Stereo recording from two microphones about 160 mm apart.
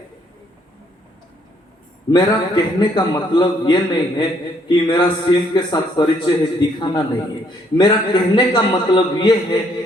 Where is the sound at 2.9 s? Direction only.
25° left (ahead or behind).